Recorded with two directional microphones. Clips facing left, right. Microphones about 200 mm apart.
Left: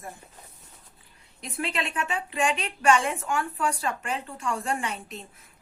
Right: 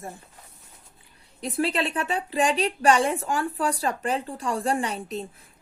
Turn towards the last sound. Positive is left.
turn(degrees=-35)  # may be behind; listen again after turning